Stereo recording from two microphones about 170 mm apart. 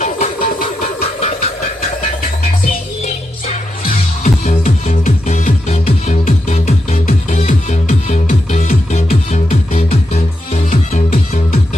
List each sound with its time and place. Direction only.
0.0 s music: 50° left (ahead or behind)
1.0 s a sound: 35° left (ahead or behind)
2.6 s music: 55° left (ahead or behind)